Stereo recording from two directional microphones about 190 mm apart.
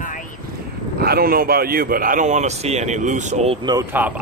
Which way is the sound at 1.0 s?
55° right (ahead or behind).